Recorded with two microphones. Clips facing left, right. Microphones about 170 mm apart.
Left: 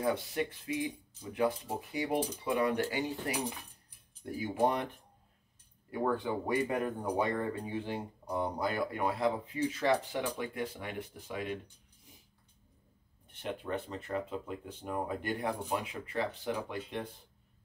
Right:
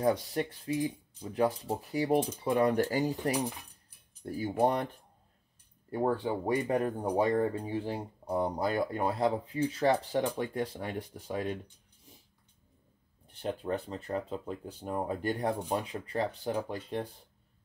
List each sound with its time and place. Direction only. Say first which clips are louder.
0.0 s speech: right 3 dB; 35° right (ahead or behind)
4.2 s speech: right 2 dB; 40° right (ahead or behind)
5.9 s speech: right 2 dB; 35° right (ahead or behind)
13.3 s speech: right 3 dB; 35° right (ahead or behind)